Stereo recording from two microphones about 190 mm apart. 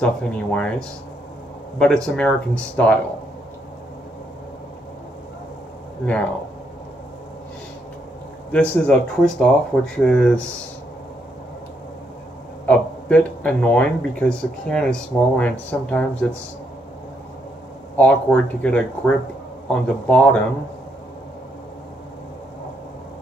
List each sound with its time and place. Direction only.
0.0 s speech: 5° left (ahead or behind)
1.8 s speech: 5° left (ahead or behind)
8.5 s speech: 5° left (ahead or behind)
12.6 s speech: 10° left (ahead or behind)
17.9 s speech: 10° left (ahead or behind)